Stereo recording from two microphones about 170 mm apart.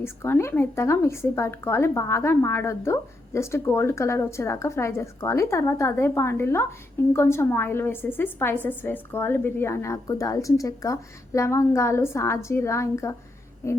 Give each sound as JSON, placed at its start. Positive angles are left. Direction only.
{"t": 0.0, "sound": "a woman's voice", "side_deg": 15}